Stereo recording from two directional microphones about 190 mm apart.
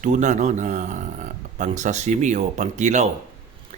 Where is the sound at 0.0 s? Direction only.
40° right (ahead or behind).